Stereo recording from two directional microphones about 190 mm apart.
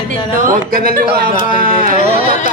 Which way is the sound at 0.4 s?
50° right (ahead or behind).